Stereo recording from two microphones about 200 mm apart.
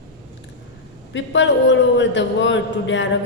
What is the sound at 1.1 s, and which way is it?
A man's voice, 65° left (ahead or behind).